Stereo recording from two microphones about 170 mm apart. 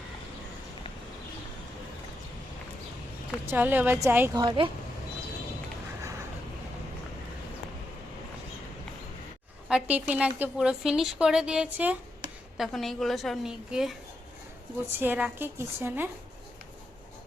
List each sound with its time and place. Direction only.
3.4 s a woman's voice: 10° right (ahead or behind)
4.4 s speech: 30° right (ahead or behind)
9.6 s a woman's voice: 5° right (ahead or behind)
14.9 s a woman's voice: 10° right (ahead or behind)